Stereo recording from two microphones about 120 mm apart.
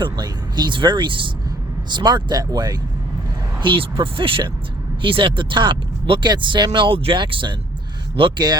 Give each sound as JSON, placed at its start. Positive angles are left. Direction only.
{"t": 0.0, "sound": "speech", "side_deg": -40}
{"t": 3.6, "sound": "speech", "side_deg": -45}